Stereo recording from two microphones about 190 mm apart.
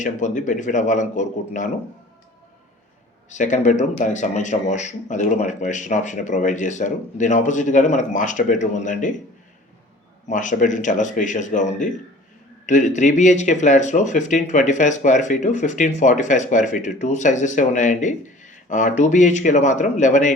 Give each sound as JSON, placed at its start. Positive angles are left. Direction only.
{"t": 0.0, "sound": "speech", "side_deg": 40}
{"t": 3.3, "sound": "speech", "side_deg": 40}
{"t": 10.2, "sound": "speech", "side_deg": 40}